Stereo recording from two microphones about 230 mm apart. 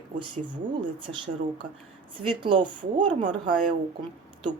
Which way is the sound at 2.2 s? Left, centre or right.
Right.